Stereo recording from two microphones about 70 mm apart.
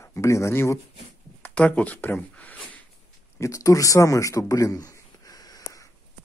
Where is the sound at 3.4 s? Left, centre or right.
Left.